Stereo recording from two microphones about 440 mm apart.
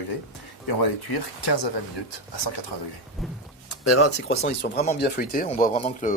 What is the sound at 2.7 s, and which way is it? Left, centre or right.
Speech, left.